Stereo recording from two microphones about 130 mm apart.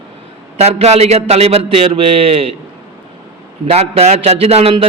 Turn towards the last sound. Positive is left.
turn(degrees=-50)  # may be behind; listen again after turning